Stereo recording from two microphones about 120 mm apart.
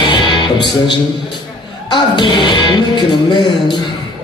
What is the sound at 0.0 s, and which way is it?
Music, 40° left (ahead or behind).